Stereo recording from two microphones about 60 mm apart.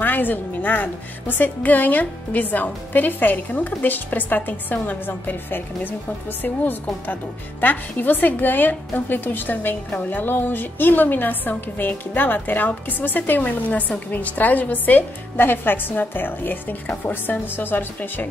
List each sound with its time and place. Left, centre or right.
0.0 s a woman's voice: left